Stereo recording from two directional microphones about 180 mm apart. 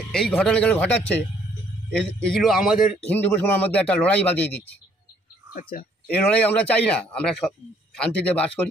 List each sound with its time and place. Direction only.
0.1 s a man's voice: 5° left (ahead or behind)
3.1 s a man's voice: 10° left (ahead or behind)
5.5 s speech: 50° left (ahead or behind)
6.0 s a man's voice: 5° left (ahead or behind)